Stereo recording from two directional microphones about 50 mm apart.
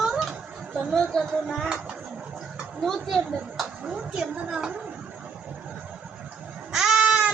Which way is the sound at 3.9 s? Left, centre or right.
Centre.